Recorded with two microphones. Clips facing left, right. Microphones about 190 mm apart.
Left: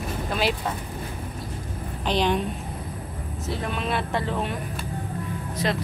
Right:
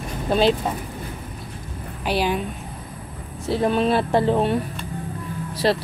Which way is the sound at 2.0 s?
5° right (ahead or behind).